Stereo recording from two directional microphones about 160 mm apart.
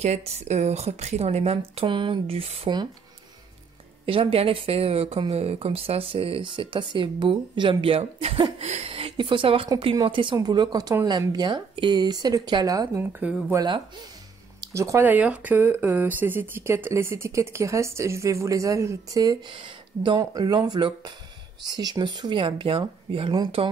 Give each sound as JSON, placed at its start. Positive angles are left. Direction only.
{"t": 0.0, "sound": "speech", "side_deg": -45}
{"t": 1.8, "sound": "speech", "side_deg": -30}
{"t": 4.0, "sound": "speech", "side_deg": -35}